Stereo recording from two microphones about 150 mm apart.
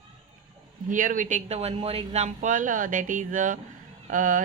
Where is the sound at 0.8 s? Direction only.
60° right (ahead or behind).